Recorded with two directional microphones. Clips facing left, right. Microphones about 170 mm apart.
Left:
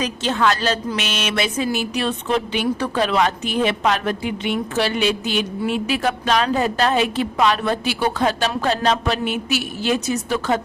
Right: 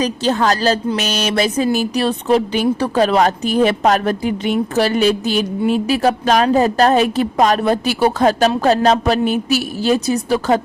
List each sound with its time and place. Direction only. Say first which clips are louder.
0.0 s speech: right 4 dB; 40° right (ahead or behind)